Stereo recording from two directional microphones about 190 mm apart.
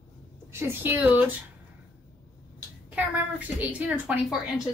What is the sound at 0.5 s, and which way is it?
Speech, 10° right (ahead or behind).